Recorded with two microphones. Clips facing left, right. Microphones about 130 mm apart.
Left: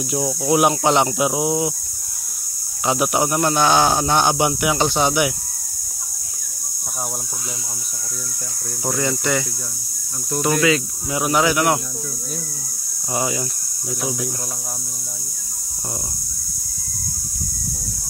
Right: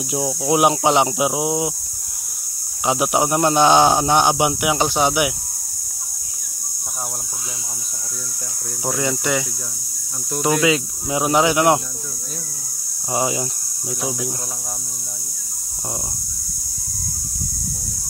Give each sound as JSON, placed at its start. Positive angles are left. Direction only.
{"t": 0.1, "sound": "speech", "side_deg": -15}
{"t": 2.8, "sound": "speech", "side_deg": -15}
{"t": 8.8, "sound": "speech", "side_deg": -10}
{"t": 10.6, "sound": "speech", "side_deg": -20}
{"t": 13.1, "sound": "speech", "side_deg": -20}